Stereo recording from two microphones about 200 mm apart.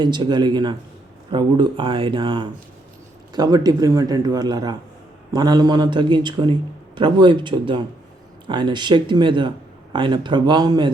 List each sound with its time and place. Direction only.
0.0 s speech: 20° right (ahead or behind)